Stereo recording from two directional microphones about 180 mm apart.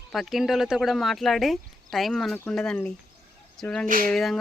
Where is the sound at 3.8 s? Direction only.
50° right (ahead or behind).